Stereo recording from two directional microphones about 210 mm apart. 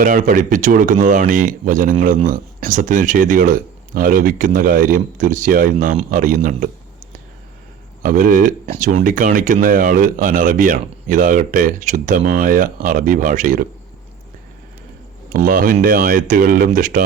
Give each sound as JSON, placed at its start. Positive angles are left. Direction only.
{"t": 0.0, "sound": "speech", "side_deg": -40}
{"t": 8.0, "sound": "speech", "side_deg": -40}
{"t": 15.3, "sound": "speech", "side_deg": -40}